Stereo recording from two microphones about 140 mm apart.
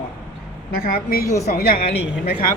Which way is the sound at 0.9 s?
90° left.